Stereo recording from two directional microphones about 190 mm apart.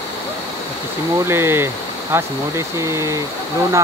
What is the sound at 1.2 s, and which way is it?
Speech, 15° right (ahead or behind).